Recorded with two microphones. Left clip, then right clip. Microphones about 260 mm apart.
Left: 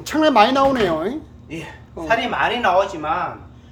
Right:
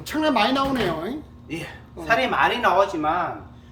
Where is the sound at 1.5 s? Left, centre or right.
Centre.